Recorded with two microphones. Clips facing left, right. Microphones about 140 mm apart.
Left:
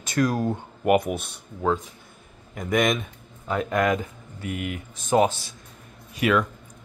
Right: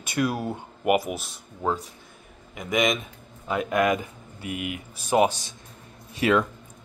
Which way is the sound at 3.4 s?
10° right (ahead or behind).